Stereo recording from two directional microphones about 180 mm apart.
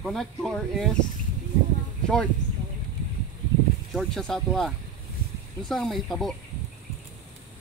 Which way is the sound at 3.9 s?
Centre (ahead or behind).